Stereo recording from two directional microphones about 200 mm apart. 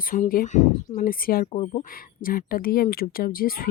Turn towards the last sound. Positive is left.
turn(degrees=45)  # may be behind; listen again after turning